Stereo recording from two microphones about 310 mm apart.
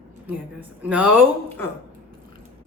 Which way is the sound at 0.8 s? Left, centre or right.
Centre.